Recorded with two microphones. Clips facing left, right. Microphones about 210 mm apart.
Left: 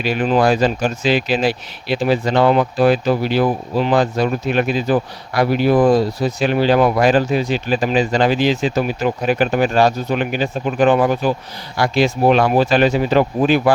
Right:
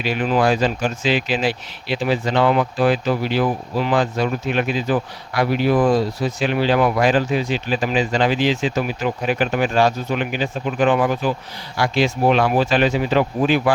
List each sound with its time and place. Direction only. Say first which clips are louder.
0.0 s speech: left 3 dB; 45° left (ahead or behind)